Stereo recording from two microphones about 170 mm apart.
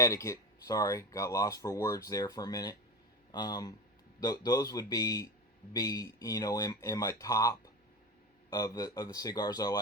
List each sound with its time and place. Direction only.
0.0 s speech: 20° left (ahead or behind)